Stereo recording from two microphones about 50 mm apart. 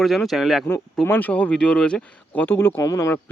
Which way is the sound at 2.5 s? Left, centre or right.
Left.